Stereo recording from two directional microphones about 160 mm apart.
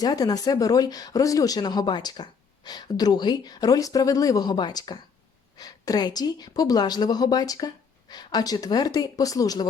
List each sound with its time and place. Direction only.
0.0 s speech: 25° left (ahead or behind)